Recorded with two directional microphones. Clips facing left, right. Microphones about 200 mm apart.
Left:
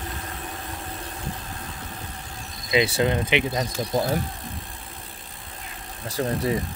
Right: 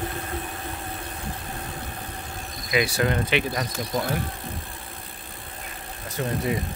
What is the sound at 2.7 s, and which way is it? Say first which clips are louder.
Speech: left 2 dB; 25° left (ahead or behind).